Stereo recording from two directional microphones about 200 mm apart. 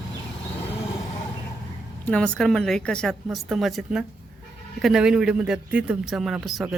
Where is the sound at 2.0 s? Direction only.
5° left (ahead or behind).